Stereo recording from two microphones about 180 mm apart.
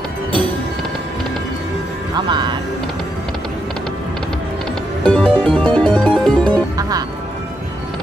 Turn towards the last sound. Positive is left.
turn(degrees=-20)  # may be behind; listen again after turning